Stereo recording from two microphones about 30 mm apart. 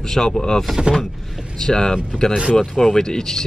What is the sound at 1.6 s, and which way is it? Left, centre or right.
Speech, centre.